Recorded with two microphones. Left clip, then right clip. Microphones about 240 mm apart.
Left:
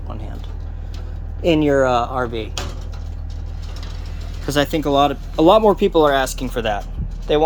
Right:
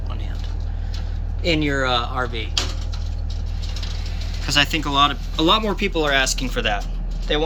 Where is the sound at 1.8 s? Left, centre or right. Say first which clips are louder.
Left 4 dB; left.